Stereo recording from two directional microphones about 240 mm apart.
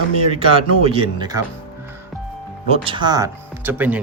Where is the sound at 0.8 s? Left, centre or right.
Right.